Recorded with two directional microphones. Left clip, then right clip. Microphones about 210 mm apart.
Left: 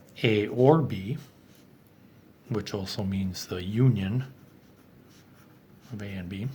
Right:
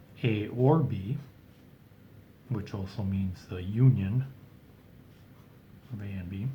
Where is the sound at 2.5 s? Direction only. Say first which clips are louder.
Left 7 dB; 40° left (ahead or behind).